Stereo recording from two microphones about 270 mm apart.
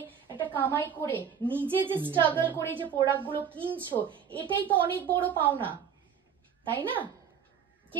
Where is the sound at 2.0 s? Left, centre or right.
Centre.